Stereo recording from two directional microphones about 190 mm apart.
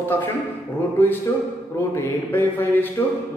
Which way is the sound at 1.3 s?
15° left (ahead or behind).